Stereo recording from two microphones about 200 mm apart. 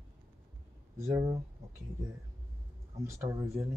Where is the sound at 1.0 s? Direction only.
15° right (ahead or behind).